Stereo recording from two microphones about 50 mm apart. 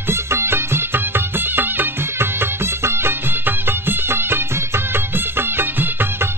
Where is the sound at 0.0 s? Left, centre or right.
Right.